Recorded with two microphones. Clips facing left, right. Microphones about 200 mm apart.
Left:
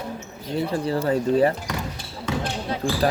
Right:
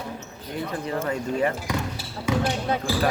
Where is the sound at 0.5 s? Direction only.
30° left (ahead or behind).